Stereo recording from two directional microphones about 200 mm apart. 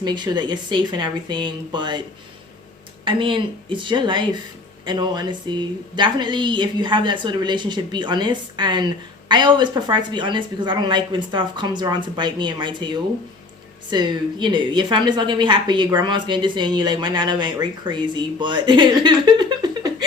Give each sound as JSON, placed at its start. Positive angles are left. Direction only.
{"t": 0.0, "sound": "a woman's voice", "side_deg": -20}
{"t": 3.0, "sound": "a woman's voice", "side_deg": -25}